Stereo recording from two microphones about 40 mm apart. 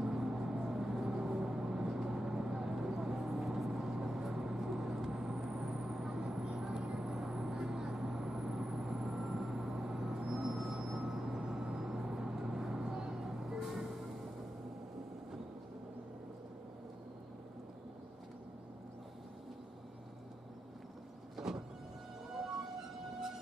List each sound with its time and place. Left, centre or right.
0.0 s vehicle: centre
21.4 s vehicle: centre